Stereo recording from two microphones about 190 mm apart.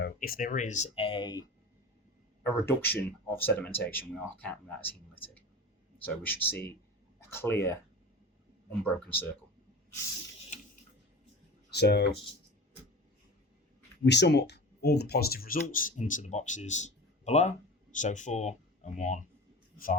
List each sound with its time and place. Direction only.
0.0 s speech: 50° left (ahead or behind); by 1.5 s 20° left (ahead or behind)
2.4 s speech: 10° left (ahead or behind)
6.2 s speech: 10° left (ahead or behind)
8.8 s speech: 10° left (ahead or behind)
11.7 s speech: 60° left (ahead or behind)
14.0 s a man's voice: 65° left (ahead or behind); by 20.0 s 45° left (ahead or behind)